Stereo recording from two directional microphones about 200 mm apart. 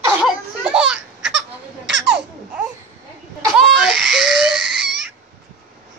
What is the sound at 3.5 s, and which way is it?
Crying, 5° right (ahead or behind).